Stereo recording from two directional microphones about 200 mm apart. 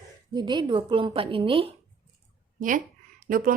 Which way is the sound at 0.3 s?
20° right (ahead or behind).